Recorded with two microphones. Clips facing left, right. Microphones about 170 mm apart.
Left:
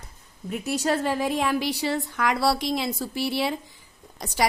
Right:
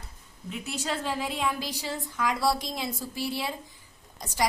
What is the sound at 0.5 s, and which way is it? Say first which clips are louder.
Speech: left 8 dB; 45° left (ahead or behind).